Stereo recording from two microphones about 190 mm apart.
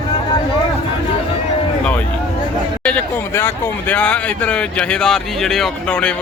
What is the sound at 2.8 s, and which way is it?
Speech, 10° left (ahead or behind).